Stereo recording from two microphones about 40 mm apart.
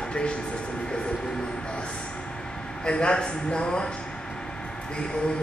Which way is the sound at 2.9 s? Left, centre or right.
Left.